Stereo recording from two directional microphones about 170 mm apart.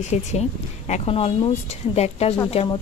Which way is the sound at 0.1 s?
40° left (ahead or behind).